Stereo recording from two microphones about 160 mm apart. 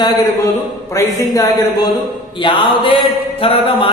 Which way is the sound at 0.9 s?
20° left (ahead or behind).